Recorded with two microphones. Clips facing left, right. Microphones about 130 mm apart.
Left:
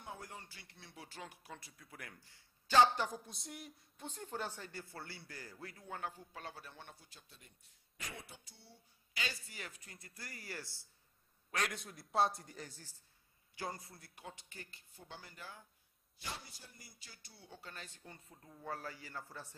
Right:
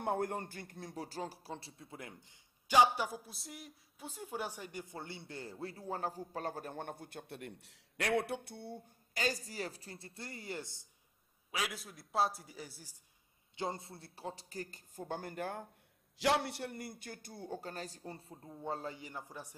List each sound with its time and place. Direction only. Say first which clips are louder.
0.0 s a man's voice: right 14 dB; 55° right (ahead or behind); by 10.9 s 20° right (ahead or behind)
11.5 s a man's voice: even; 5° right (ahead or behind)
13.6 s a man's voice: right 5 dB; 25° right (ahead or behind); by 15.7 s 55° right (ahead or behind)
16.2 s a man's voice: right 17 dB; 80° right; by 19.5 s 15° right (ahead or behind)